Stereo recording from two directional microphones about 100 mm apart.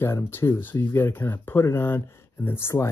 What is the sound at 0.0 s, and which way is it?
Speech, 25° left (ahead or behind).